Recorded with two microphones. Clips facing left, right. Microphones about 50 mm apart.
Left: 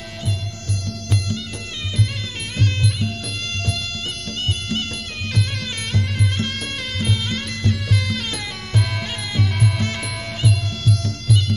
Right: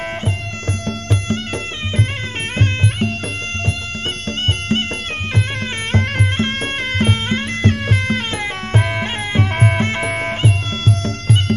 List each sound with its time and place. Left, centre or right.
2.5 s music: right
4.3 s music: right
5.9 s music: right